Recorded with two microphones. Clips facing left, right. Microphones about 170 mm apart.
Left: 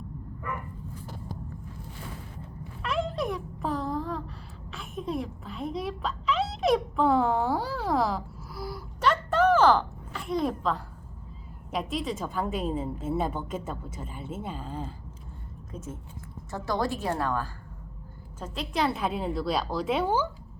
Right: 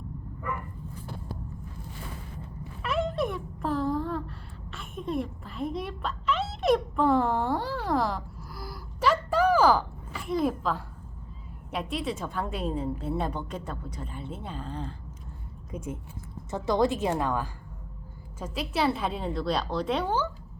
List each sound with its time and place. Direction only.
2.8 s a sound: centre (ahead or behind)
11.7 s a woman's voice: centre (ahead or behind)
15.7 s a woman's voice: 15° right (ahead or behind); by 20.3 s 10° left (ahead or behind)